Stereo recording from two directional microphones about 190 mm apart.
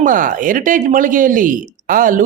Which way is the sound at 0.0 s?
45° right (ahead or behind).